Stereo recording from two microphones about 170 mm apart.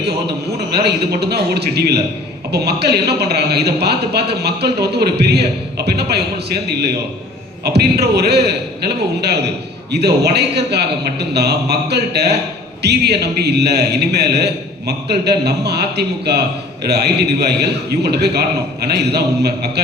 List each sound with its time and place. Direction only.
0.7 s a man's voice: 70° right (ahead or behind)